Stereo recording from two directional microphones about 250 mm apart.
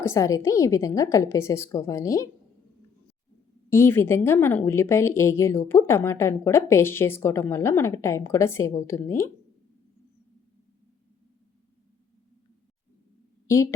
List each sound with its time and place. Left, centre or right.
0.0 s speech: centre
3.7 s speech: centre
13.5 s speech: centre